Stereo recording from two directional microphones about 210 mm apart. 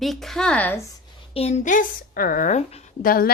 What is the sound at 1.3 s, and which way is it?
A woman's voice, 30° left (ahead or behind).